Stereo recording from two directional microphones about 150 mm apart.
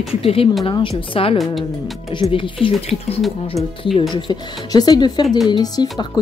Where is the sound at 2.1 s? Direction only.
35° left (ahead or behind).